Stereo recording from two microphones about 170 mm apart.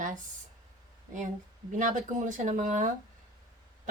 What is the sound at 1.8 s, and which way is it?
A woman's voice, 50° right (ahead or behind).